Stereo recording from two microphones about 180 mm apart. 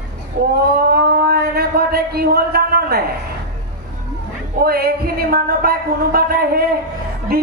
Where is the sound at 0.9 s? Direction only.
60° right (ahead or behind).